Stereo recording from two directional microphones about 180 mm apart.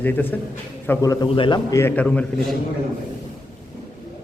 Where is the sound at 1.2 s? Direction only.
30° left (ahead or behind); by 2.2 s 5° left (ahead or behind).